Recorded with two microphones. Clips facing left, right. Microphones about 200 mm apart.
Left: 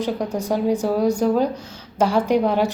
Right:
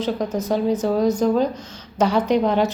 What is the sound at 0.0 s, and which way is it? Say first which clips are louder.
Speech: right 1 dB; 10° left (ahead or behind).